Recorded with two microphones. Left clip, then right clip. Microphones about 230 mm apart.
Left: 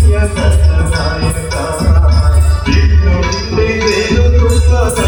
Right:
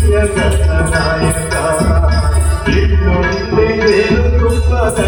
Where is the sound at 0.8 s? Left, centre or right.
Right.